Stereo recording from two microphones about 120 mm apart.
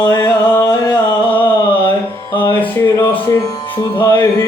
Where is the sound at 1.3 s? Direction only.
15° left (ahead or behind).